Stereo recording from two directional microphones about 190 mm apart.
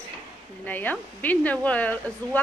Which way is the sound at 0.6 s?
10° left (ahead or behind).